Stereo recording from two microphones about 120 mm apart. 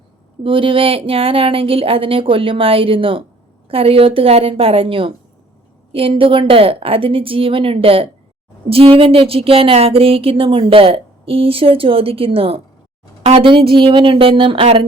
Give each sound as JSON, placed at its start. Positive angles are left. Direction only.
{"t": 0.4, "sound": "speech", "side_deg": -45}